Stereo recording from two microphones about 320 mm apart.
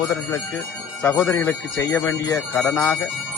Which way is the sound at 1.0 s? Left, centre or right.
Centre.